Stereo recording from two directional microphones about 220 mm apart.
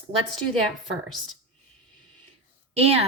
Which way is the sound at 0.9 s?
Centre (ahead or behind).